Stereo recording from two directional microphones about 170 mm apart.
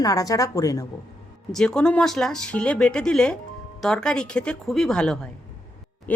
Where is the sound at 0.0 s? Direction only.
20° left (ahead or behind).